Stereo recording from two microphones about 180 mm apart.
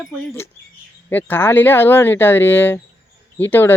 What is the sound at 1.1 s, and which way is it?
Speech, 10° left (ahead or behind).